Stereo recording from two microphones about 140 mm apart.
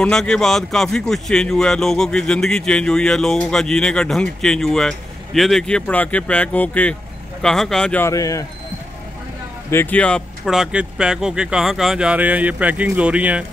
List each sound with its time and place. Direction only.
0.0 s speech: 5° left (ahead or behind)
8.0 s speech: 25° left (ahead or behind)
9.7 s speech: 15° left (ahead or behind)
10.5 s speech: 5° right (ahead or behind)